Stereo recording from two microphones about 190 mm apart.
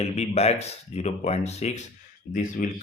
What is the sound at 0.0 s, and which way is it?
Speech, 35° left (ahead or behind).